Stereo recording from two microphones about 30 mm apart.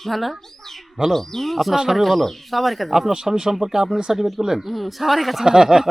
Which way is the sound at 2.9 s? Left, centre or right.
Centre.